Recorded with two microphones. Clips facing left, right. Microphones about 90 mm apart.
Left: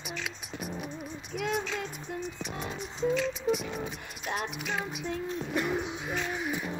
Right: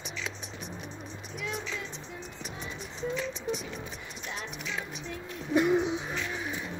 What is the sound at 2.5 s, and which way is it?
Music, 60° left (ahead or behind).